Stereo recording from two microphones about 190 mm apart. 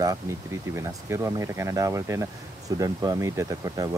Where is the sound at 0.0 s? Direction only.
15° right (ahead or behind).